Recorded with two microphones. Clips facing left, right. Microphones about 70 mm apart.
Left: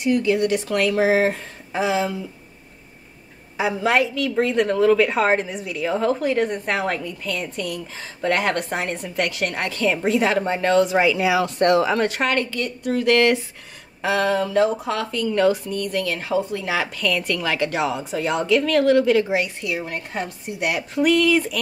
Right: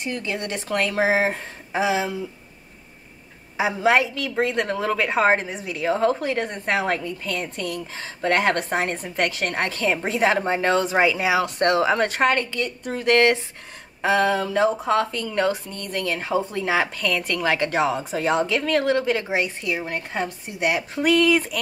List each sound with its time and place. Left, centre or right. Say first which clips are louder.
0.0 s a woman's voice: left 9 dB; right
3.5 s a woman's voice: even; centre
5.9 s a woman's voice: left 4 dB; centre
7.2 s a woman's voice: left 2 dB; right
8.0 s a woman's voice: even; centre
8.4 s a woman's voice: right 1 dB; right
14.9 s a woman's voice: right 1 dB; right